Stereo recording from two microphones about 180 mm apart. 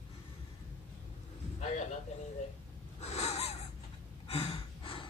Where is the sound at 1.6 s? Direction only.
40° left (ahead or behind).